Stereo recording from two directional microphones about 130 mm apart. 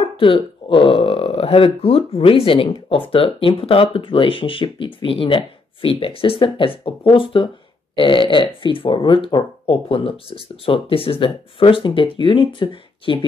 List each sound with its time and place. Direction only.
0.2 s speech: 40° left (ahead or behind)